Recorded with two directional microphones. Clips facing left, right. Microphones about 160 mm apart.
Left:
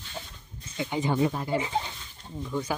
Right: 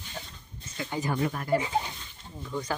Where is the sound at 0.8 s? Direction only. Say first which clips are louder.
Left 4 dB; 20° left (ahead or behind).